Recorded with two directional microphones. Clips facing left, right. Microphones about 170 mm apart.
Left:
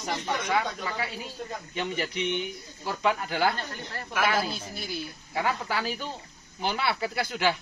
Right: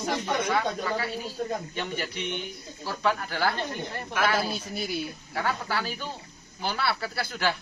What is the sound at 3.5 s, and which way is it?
Speech, 20° right (ahead or behind).